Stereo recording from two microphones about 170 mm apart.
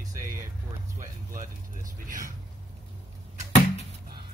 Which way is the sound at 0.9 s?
50° right (ahead or behind).